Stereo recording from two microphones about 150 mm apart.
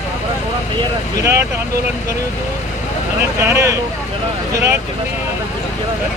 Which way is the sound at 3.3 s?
20° right (ahead or behind).